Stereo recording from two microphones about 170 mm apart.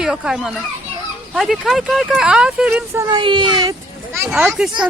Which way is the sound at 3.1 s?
30° right (ahead or behind).